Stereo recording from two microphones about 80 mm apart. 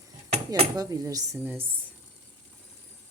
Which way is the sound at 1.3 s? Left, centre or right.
Right.